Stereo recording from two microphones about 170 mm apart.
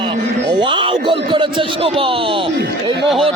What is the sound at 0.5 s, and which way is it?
Speech, 30° right (ahead or behind).